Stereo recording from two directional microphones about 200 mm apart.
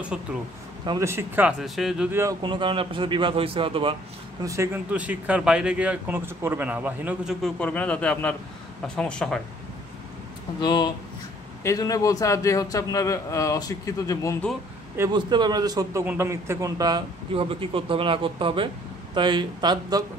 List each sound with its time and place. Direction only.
0.1 s a man's voice: 5° right (ahead or behind)
0.8 s a man's voice: 15° right (ahead or behind)
2.4 s a man's voice: 25° right (ahead or behind)
4.4 s a man's voice: 15° right (ahead or behind)
7.4 s a man's voice: 5° left (ahead or behind)
10.6 s a man's voice: 20° left (ahead or behind)
15.0 s a man's voice: 20° right (ahead or behind)